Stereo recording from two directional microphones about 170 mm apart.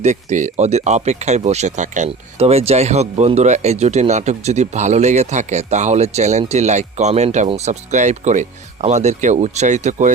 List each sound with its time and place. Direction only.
0.0 s speech: 45° right (ahead or behind)